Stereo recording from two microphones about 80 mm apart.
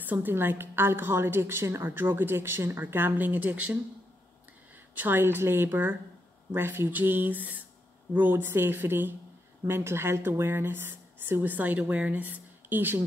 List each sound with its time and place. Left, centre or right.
0.0 s speech: right
4.9 s speech: right